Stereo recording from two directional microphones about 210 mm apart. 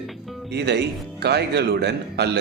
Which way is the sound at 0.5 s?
55° right (ahead or behind).